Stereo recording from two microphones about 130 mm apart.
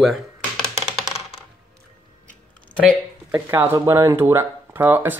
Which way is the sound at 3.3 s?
15° right (ahead or behind).